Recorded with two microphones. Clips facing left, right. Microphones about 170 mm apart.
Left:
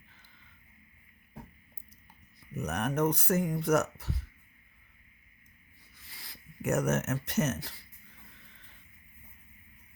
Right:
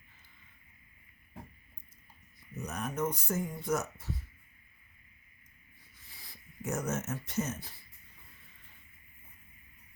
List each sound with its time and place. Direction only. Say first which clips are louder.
2.6 s speech: left 5 dB; 65° left (ahead or behind)
6.0 s speech: left 3 dB; 80° left